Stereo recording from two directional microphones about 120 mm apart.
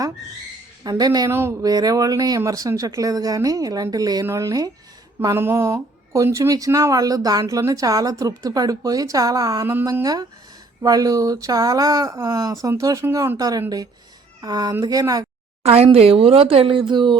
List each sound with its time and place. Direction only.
0.9 s speech: 35° right (ahead or behind)
1.3 s speech: 20° right (ahead or behind)
1.6 s speech: 35° right (ahead or behind)
15.6 s speech: 55° right (ahead or behind); by 17.2 s 40° right (ahead or behind)